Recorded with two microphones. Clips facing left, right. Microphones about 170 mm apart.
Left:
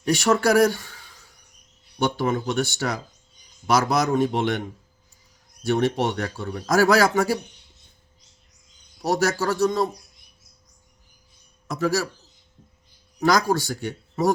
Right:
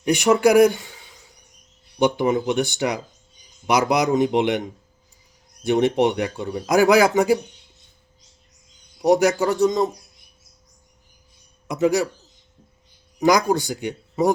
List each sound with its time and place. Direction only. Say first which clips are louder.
0.0 s a man's voice: right 4 dB; 15° right (ahead or behind)
9.0 s a man's voice: right 6 dB; 15° right (ahead or behind)
11.7 s a man's voice: right 4 dB; 20° right (ahead or behind)
13.1 s speech: right 3 dB; 15° right (ahead or behind)